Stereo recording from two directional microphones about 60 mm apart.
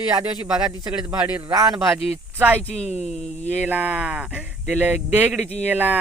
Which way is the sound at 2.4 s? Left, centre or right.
Right.